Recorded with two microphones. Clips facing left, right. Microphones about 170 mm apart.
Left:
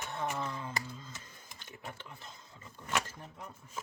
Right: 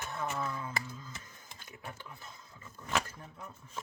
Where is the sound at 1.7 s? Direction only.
25° left (ahead or behind).